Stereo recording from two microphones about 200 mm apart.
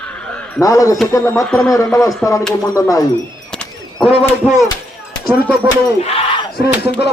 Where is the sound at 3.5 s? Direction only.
5° left (ahead or behind).